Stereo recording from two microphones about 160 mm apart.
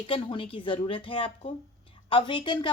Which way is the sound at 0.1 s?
35° left (ahead or behind).